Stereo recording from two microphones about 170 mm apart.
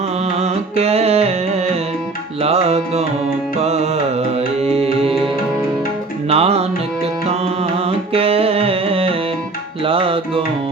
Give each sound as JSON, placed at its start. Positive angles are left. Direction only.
{"t": 0.3, "sound": "music", "side_deg": -40}
{"t": 6.2, "sound": "music", "side_deg": -35}